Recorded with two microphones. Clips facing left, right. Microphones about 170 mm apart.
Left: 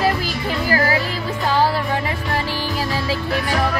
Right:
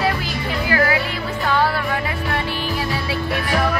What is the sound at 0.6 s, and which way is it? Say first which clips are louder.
Speech: even; 35° left (ahead or behind).